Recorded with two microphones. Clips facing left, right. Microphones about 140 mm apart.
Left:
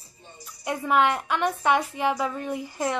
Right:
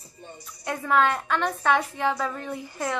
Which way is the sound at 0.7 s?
15° left (ahead or behind).